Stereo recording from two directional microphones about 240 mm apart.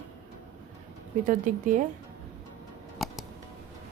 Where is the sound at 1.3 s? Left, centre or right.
Right.